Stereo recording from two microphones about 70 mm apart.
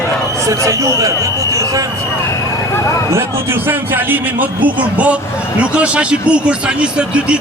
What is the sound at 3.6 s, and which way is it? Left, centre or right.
Speech, right.